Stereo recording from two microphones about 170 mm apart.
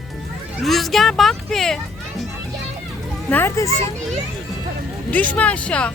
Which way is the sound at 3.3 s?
15° left (ahead or behind).